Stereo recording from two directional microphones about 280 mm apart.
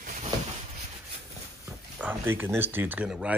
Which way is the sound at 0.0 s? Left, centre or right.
Right.